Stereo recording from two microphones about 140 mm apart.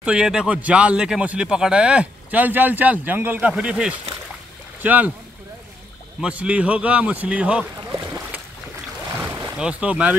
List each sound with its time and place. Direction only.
0.0 s speech: 5° right (ahead or behind)
6.2 s speech: 10° right (ahead or behind)
9.2 s a sound: 20° right (ahead or behind)
9.6 s speech: 5° right (ahead or behind)